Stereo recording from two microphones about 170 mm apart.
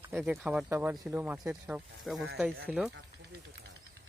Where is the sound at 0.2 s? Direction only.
5° right (ahead or behind).